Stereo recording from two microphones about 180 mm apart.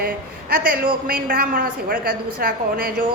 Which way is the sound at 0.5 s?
55° right (ahead or behind).